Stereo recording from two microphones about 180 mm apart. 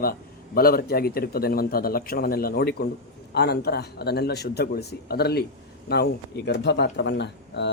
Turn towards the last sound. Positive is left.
turn(degrees=70)  # may be behind; listen again after turning